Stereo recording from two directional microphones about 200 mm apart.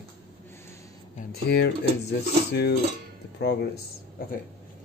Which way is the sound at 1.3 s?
55° left (ahead or behind).